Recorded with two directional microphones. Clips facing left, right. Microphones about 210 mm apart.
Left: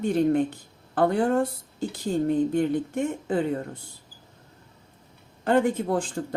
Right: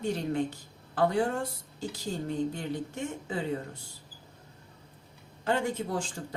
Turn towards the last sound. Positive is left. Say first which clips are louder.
# left 7 dB
turn(degrees=55)  # may be behind; listen again after turning